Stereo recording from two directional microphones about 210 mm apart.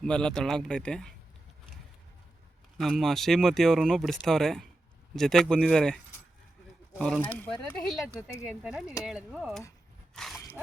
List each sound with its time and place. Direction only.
0.0 s speech: 5° left (ahead or behind)
2.7 s speech: centre (ahead or behind)
10.2 s dog: centre (ahead or behind)